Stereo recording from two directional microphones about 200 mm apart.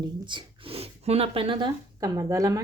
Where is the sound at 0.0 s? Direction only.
25° right (ahead or behind).